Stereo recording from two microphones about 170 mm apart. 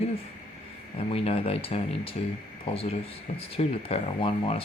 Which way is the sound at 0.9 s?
35° left (ahead or behind).